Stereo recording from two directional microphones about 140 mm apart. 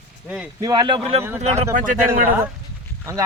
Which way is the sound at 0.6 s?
30° right (ahead or behind).